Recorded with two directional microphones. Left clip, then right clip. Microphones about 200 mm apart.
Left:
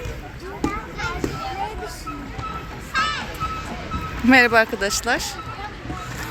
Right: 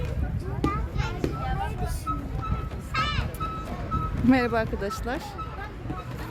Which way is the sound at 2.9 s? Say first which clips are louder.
Left 6 dB; 40° left (ahead or behind).